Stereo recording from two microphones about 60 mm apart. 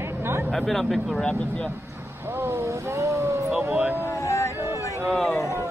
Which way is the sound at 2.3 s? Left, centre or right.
Right.